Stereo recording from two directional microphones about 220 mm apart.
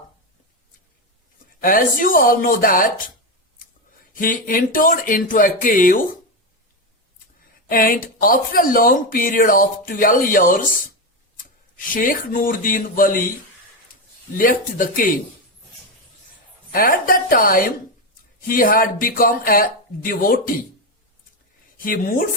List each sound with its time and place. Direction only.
1.6 s speech: 40° left (ahead or behind)
4.1 s speech: 40° left (ahead or behind)
7.7 s speech: 40° left (ahead or behind)
11.9 s speech: 40° left (ahead or behind)
14.3 s speech: 40° left (ahead or behind)
16.7 s speech: 40° left (ahead or behind)
21.8 s speech: 40° left (ahead or behind)